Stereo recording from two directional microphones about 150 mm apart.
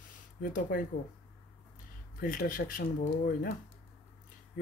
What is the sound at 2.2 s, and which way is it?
Speech, 70° left (ahead or behind).